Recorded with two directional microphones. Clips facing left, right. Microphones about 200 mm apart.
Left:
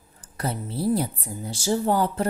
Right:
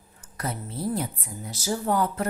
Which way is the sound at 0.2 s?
30° left (ahead or behind).